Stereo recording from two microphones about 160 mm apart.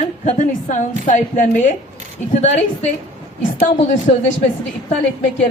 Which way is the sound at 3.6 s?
50° left (ahead or behind).